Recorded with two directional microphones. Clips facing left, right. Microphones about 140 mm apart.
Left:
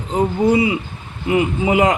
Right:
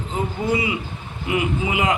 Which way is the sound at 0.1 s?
30° left (ahead or behind).